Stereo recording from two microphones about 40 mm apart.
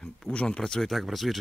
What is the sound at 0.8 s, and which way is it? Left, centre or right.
Speech, centre.